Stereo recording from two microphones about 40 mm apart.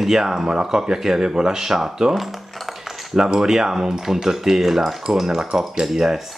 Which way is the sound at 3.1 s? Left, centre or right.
Centre.